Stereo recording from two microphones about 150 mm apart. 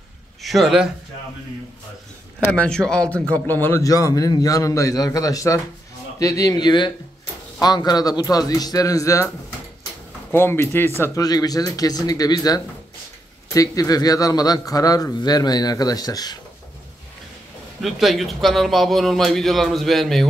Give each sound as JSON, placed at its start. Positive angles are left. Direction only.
{"t": 0.4, "sound": "speech", "side_deg": 0}
{"t": 2.5, "sound": "speech", "side_deg": 5}
{"t": 10.3, "sound": "speech", "side_deg": 15}
{"t": 17.8, "sound": "a man's voice", "side_deg": 0}